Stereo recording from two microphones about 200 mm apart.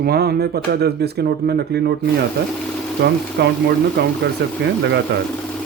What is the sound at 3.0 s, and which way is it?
Speech, 60° right (ahead or behind).